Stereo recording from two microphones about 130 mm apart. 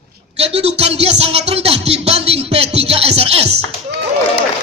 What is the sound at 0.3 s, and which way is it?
Speech, 50° right (ahead or behind).